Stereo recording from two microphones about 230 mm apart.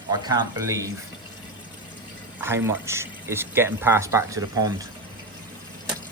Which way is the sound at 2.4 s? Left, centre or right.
Centre.